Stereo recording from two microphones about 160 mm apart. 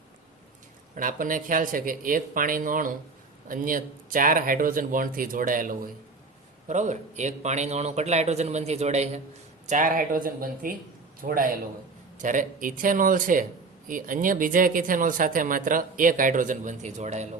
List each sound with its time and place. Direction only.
0.9 s a man's voice: 55° right (ahead or behind)
9.6 s speech: 55° right (ahead or behind)